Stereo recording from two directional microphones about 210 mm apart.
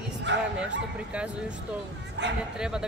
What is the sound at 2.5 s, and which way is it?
Speech, 5° right (ahead or behind).